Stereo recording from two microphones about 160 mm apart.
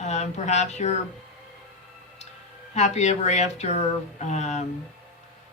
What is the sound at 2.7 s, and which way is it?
A woman's voice, 45° left (ahead or behind).